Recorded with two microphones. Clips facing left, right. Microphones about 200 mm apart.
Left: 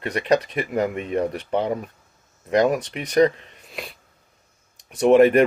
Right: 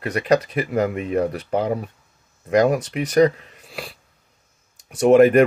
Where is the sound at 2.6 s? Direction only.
35° right (ahead or behind).